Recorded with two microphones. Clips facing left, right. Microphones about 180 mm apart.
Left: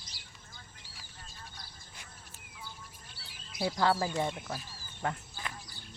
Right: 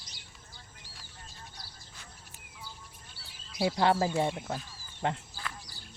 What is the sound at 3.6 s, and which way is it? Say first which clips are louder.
Speech: right 3 dB; 20° right (ahead or behind).